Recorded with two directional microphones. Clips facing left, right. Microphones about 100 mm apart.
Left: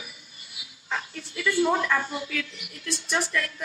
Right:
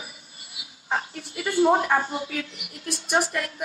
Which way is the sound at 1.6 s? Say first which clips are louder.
Right 5 dB; 30° right (ahead or behind).